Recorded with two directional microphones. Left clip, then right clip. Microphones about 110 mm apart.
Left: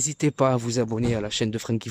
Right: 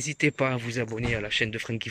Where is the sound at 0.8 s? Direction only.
25° left (ahead or behind).